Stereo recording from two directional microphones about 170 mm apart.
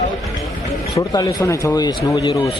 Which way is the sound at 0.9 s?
20° left (ahead or behind).